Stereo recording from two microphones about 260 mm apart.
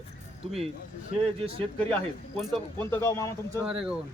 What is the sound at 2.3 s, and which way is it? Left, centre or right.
Speech, centre.